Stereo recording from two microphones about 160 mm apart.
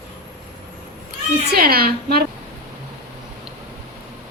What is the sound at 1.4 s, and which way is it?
Speech, 75° right (ahead or behind).